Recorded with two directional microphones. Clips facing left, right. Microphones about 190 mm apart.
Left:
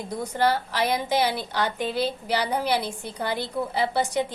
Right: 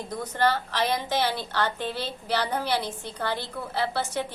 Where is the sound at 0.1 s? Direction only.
10° left (ahead or behind).